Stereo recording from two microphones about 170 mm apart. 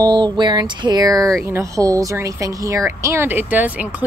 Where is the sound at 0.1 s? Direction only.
25° right (ahead or behind).